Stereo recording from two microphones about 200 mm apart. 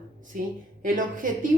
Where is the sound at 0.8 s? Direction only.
45° right (ahead or behind).